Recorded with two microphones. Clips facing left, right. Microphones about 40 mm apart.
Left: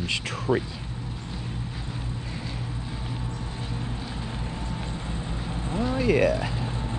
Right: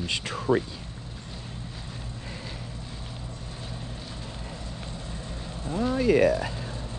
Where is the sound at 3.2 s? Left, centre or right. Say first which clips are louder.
Left 5 dB; left.